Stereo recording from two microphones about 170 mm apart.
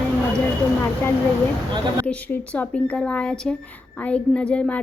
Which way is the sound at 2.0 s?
10° left (ahead or behind).